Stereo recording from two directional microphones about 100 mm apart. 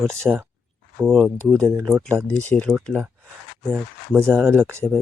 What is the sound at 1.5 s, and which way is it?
Speech, 35° right (ahead or behind).